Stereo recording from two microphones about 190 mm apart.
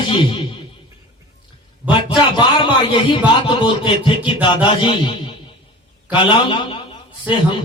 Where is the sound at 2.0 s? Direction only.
25° left (ahead or behind).